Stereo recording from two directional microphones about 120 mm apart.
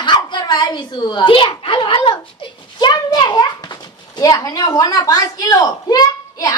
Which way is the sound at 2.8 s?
35° left (ahead or behind).